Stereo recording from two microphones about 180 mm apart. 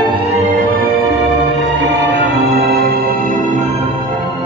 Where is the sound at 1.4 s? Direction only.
75° right (ahead or behind); by 3.7 s 45° right (ahead or behind).